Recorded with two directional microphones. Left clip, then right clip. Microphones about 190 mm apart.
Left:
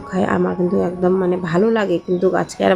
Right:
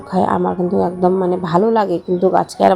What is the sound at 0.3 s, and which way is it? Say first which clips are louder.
Speech: left 1 dB; 10° left (ahead or behind).